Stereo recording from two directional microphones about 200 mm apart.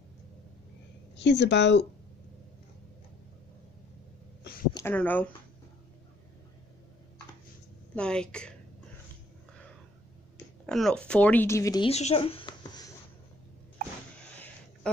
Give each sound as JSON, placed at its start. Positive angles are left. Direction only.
{"t": 1.1, "sound": "a woman's voice", "side_deg": 60}
{"t": 4.7, "sound": "speech", "side_deg": 10}
{"t": 7.9, "sound": "speech", "side_deg": 5}
{"t": 10.7, "sound": "speech", "side_deg": 0}
{"t": 11.9, "sound": "speech", "side_deg": 30}